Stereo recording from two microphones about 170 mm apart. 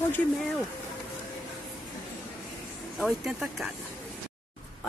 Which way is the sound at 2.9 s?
Centre (ahead or behind).